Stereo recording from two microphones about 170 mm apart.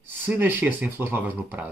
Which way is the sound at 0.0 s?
10° right (ahead or behind).